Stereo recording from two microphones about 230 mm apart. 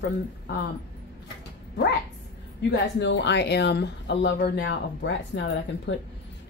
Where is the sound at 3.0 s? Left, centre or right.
Left.